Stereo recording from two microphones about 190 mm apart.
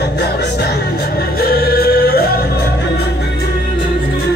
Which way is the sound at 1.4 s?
55° left (ahead or behind).